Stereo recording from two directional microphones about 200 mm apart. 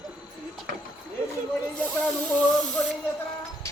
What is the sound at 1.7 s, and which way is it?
Spray, 5° left (ahead or behind).